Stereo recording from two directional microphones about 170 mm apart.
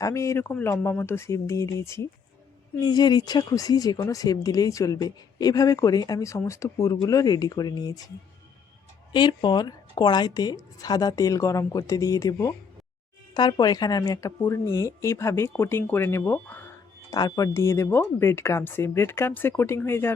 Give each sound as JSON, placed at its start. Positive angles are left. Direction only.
{"t": 0.0, "sound": "speech", "side_deg": 15}
{"t": 9.1, "sound": "speech", "side_deg": 25}